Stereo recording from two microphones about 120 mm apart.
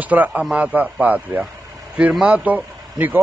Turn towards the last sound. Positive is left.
turn(degrees=-15)  # may be behind; listen again after turning